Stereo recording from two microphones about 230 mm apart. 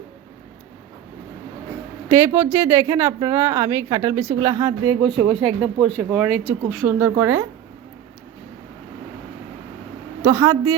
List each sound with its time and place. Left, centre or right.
2.0 s a woman's voice: centre
5.3 s speech: centre
10.2 s a woman's voice: centre